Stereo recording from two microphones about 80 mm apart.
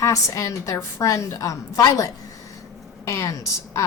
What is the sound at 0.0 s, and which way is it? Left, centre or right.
A woman's voice, left.